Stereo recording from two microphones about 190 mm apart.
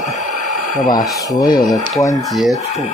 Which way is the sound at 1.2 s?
20° left (ahead or behind).